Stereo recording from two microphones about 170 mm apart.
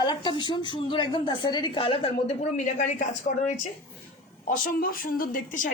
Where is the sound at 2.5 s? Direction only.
45° left (ahead or behind).